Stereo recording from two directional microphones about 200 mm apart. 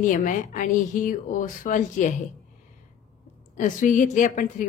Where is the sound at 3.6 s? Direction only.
40° left (ahead or behind).